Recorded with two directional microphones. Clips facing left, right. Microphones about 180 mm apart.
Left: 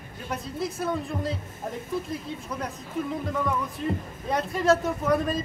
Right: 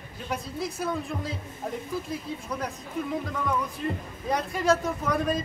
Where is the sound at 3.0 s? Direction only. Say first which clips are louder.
Left 2 dB; centre (ahead or behind).